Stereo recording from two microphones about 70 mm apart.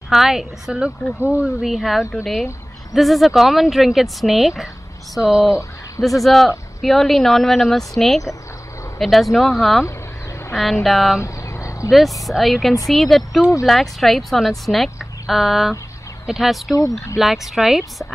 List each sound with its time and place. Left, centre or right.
0.1 s speech: centre
11.1 s a sound: left
11.9 s speech: centre